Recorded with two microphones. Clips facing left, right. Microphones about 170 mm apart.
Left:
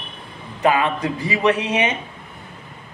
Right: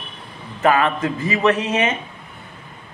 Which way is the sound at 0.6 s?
15° left (ahead or behind).